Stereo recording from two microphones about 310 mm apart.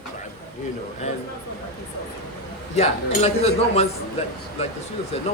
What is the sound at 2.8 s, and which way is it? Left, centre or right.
Speech, centre.